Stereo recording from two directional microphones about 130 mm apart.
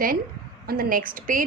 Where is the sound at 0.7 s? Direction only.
90° right.